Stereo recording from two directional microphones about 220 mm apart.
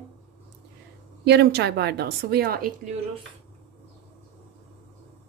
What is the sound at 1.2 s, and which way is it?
Cutlery, 50° right (ahead or behind).